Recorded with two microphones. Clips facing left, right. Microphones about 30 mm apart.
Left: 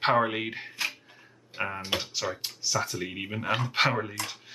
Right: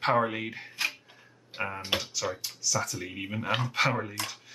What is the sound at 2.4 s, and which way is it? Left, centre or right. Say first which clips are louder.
Speech: left 1 dB; left.